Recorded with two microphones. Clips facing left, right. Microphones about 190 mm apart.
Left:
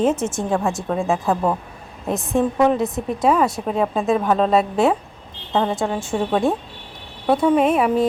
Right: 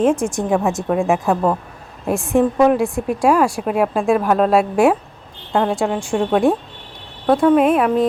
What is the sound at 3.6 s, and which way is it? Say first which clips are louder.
Speech: right 3 dB; 10° right (ahead or behind).